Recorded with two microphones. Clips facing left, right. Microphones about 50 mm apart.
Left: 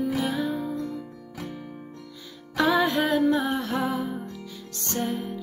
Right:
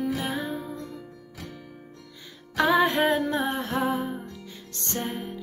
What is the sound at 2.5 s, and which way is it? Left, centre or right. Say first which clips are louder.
Music: right 1 dB; right.